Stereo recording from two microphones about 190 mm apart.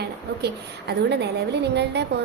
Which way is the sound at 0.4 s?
60° right (ahead or behind).